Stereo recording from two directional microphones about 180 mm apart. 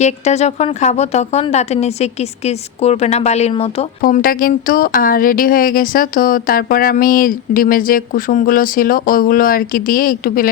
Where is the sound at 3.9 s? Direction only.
50° left (ahead or behind).